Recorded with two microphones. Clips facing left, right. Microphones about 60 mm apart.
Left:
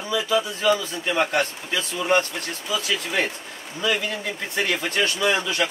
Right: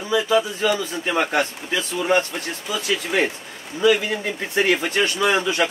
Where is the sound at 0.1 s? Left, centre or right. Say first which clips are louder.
Right 4 dB; right.